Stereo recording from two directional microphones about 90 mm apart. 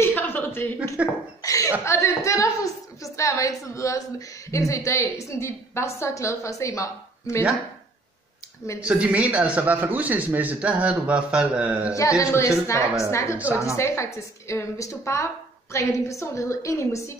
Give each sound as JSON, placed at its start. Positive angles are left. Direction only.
{"t": 0.0, "sound": "a sound", "side_deg": 25}
{"t": 1.4, "sound": "chuckle", "side_deg": 40}
{"t": 1.9, "sound": "a woman's voice", "side_deg": 35}
{"t": 8.8, "sound": "a man's voice", "side_deg": -15}
{"t": 11.9, "sound": "a woman's voice", "side_deg": 35}